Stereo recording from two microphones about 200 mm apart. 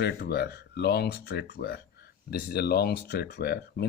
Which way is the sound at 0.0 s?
55° left (ahead or behind).